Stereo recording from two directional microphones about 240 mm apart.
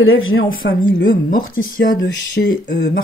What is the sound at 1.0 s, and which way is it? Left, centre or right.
Speech, left.